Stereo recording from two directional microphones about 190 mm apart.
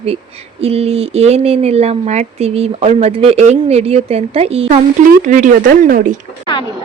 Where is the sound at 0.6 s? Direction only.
30° right (ahead or behind).